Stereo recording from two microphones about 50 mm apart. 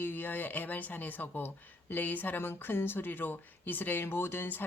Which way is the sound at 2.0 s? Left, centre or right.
Left.